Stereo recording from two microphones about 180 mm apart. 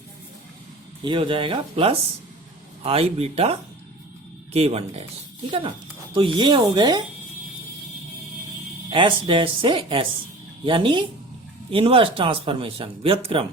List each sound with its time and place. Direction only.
1.0 s speech: 25° right (ahead or behind)
8.9 s speech: 30° right (ahead or behind)